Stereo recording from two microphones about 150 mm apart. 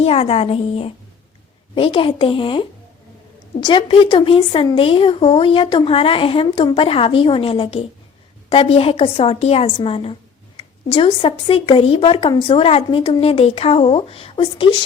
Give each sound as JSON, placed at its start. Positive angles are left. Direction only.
{"t": 0.0, "sound": "speech", "side_deg": 40}